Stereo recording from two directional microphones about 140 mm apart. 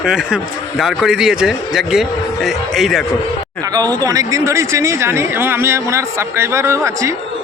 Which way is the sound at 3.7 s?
25° right (ahead or behind).